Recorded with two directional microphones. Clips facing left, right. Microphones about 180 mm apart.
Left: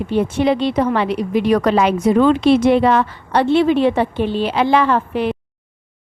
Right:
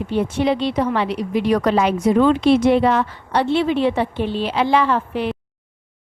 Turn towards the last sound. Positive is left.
turn(degrees=55)  # may be behind; listen again after turning